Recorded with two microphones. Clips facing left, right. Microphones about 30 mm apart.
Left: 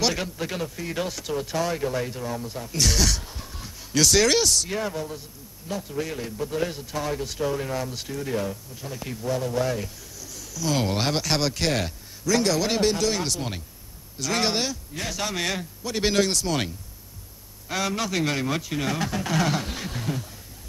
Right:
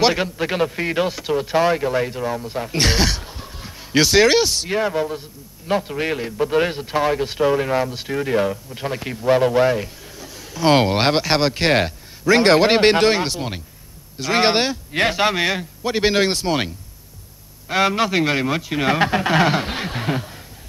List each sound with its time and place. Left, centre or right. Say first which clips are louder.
0.0 s a man's voice: right 8 dB; right
2.6 s a man's voice: right 5 dB; right
5.7 s a man's voice: right 9 dB; right
8.1 s a man's voice: right 9 dB; right
8.7 s a man's voice: right 8 dB; right
9.8 s a sound: right 6 dB; right
10.6 s a man's voice: right 9 dB; right
14.9 s speech: right 13 dB; right
15.1 s a man's voice: right 9 dB; right
18.9 s a man's voice: right 12 dB; right